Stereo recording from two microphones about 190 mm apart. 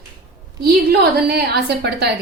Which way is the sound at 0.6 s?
55° right (ahead or behind).